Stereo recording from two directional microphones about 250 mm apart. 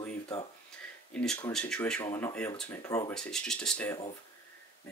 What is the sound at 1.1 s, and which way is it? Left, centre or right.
Speech, centre.